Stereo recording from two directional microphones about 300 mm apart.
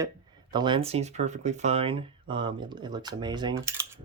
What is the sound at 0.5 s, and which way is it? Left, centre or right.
Speech, centre.